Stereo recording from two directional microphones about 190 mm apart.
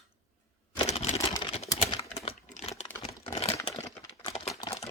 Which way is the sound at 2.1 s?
30° left (ahead or behind).